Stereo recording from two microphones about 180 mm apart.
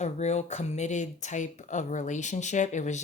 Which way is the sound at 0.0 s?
40° left (ahead or behind).